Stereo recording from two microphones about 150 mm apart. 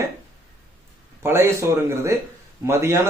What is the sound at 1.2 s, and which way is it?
Speech, 15° right (ahead or behind).